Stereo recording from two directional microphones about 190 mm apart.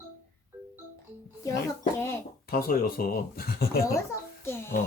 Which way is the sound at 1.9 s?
15° left (ahead or behind).